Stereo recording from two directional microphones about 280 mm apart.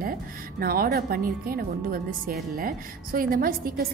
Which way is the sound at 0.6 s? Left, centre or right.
Right.